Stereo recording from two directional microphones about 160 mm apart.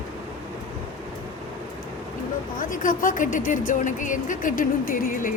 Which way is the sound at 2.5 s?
55° left (ahead or behind).